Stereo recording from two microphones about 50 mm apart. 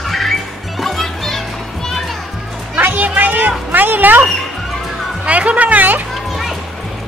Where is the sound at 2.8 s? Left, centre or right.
Right.